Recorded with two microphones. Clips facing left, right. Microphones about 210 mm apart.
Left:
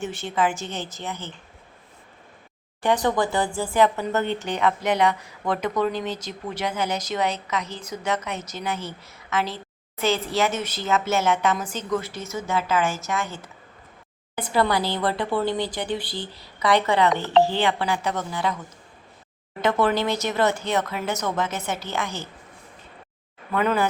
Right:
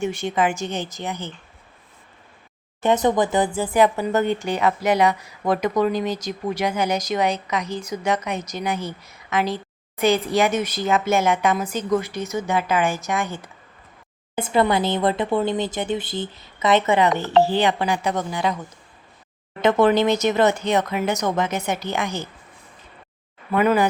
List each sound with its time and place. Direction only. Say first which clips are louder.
0.0 s a woman's voice: right 3 dB; 15° right (ahead or behind)
2.8 s a woman's voice: right 3 dB; 20° right (ahead or behind)
19.8 s a woman's voice: right 7 dB; 20° right (ahead or behind)
23.6 s a woman's voice: right 4 dB; 10° right (ahead or behind)